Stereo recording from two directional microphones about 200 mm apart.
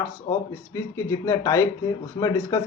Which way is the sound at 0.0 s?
15° left (ahead or behind).